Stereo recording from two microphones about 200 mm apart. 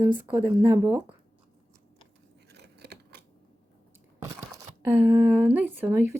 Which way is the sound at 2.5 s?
55° right (ahead or behind).